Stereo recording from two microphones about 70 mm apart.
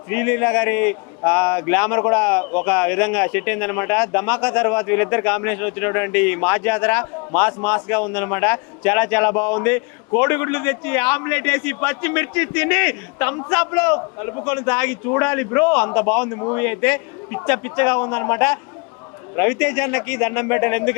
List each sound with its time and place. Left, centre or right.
0.1 s a man's voice: left